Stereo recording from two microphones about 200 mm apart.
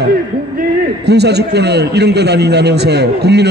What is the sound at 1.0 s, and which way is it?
A man's voice, 55° right (ahead or behind).